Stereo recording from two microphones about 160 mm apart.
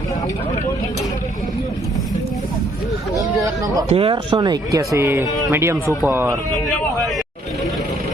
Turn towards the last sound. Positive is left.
turn(degrees=-15)  # may be behind; listen again after turning